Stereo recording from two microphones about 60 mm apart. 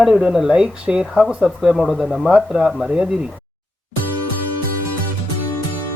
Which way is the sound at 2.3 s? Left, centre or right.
Centre.